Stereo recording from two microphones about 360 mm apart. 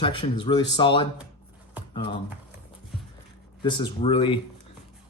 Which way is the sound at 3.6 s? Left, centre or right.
Centre.